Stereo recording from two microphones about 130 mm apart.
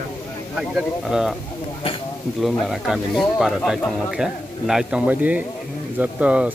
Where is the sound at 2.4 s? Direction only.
Centre (ahead or behind).